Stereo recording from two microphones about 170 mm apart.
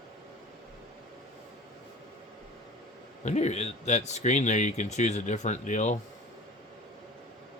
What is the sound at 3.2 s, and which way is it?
Speech, 40° left (ahead or behind).